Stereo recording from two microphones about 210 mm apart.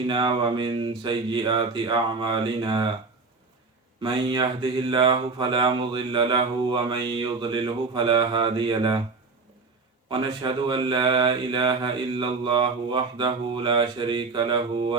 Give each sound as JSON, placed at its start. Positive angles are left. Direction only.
{"t": 0.1, "sound": "mantra", "side_deg": -20}
{"t": 4.0, "sound": "mantra", "side_deg": -20}
{"t": 10.1, "sound": "mantra", "side_deg": -20}